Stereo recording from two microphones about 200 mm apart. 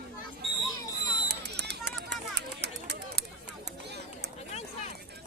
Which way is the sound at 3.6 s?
55° right (ahead or behind).